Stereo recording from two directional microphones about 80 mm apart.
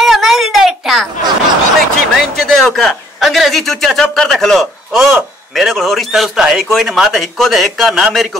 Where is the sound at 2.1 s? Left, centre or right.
Centre.